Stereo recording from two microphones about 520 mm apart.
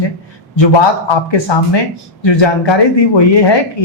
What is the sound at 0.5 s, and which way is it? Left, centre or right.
A man's voice, left.